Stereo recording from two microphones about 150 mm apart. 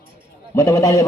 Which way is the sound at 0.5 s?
20° left (ahead or behind).